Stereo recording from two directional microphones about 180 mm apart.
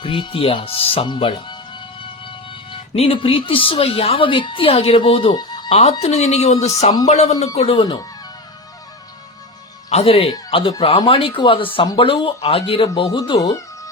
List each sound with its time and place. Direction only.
0.0 s a woman's voice: 30° left (ahead or behind)
9.9 s a woman's voice: 35° left (ahead or behind)